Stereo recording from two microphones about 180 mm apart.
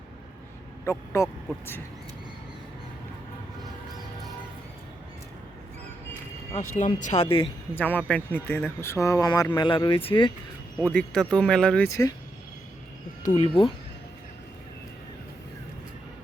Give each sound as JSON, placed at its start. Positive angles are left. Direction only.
{"t": 0.9, "sound": "speech", "side_deg": 15}
{"t": 6.5, "sound": "speech", "side_deg": 45}
{"t": 7.8, "sound": "speech", "side_deg": 10}
{"t": 10.8, "sound": "speech", "side_deg": 5}
{"t": 11.9, "sound": "speech", "side_deg": 20}
{"t": 13.3, "sound": "speech", "side_deg": 30}